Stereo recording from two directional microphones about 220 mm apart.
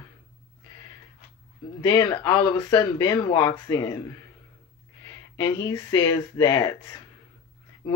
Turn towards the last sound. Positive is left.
turn(degrees=20)  # may be behind; listen again after turning